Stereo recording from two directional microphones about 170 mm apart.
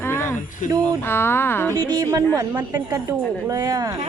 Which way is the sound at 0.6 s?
50° left (ahead or behind).